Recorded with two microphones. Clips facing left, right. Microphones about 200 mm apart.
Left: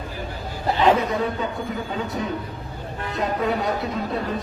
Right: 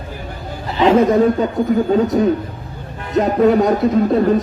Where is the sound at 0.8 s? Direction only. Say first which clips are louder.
Right 9 dB; 45° right (ahead or behind).